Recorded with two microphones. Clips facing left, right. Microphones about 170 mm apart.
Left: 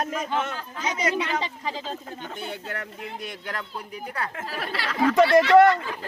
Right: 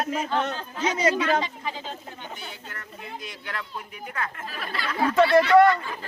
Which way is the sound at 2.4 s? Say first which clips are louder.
Left 7 dB; 65° left (ahead or behind).